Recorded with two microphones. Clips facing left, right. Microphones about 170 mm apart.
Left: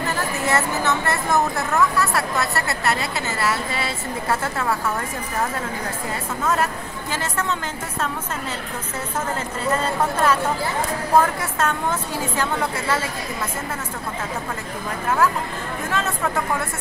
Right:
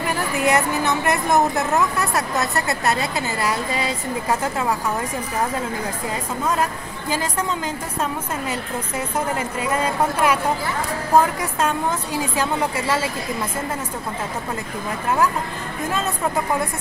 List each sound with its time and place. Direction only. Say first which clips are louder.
0.4 s a woman's voice: right 4 dB; 15° right (ahead or behind)
6.4 s a woman's voice: left 1 dB; 15° right (ahead or behind)
9.6 s a woman's voice: even; 10° right (ahead or behind)